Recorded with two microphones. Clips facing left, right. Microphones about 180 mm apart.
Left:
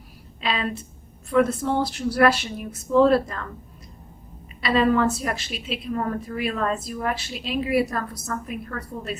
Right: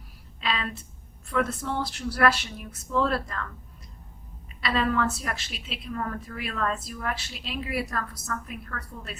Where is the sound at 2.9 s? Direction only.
25° left (ahead or behind).